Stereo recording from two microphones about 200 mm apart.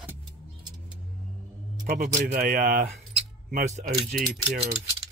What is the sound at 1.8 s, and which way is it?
Speech, 45° right (ahead or behind).